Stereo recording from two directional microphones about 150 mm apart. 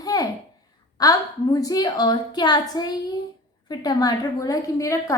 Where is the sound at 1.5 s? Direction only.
25° left (ahead or behind).